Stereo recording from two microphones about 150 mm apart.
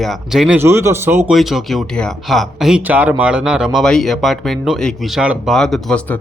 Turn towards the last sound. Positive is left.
turn(degrees=5)  # may be behind; listen again after turning